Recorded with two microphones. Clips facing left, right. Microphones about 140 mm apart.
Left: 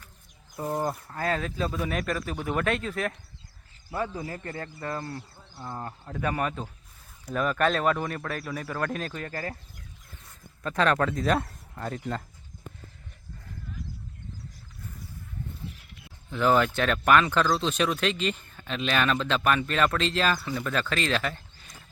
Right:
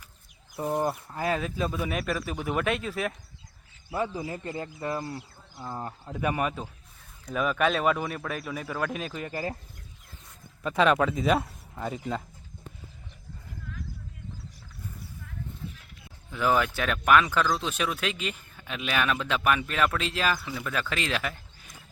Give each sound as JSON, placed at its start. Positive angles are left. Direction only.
{"t": 0.5, "sound": "speech", "side_deg": -5}
{"t": 10.6, "sound": "speech", "side_deg": -10}
{"t": 16.3, "sound": "speech", "side_deg": -5}